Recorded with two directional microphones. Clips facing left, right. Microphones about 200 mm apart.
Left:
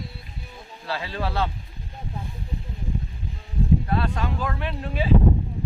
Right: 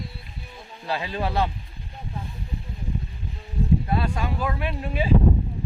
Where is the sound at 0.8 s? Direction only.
15° right (ahead or behind).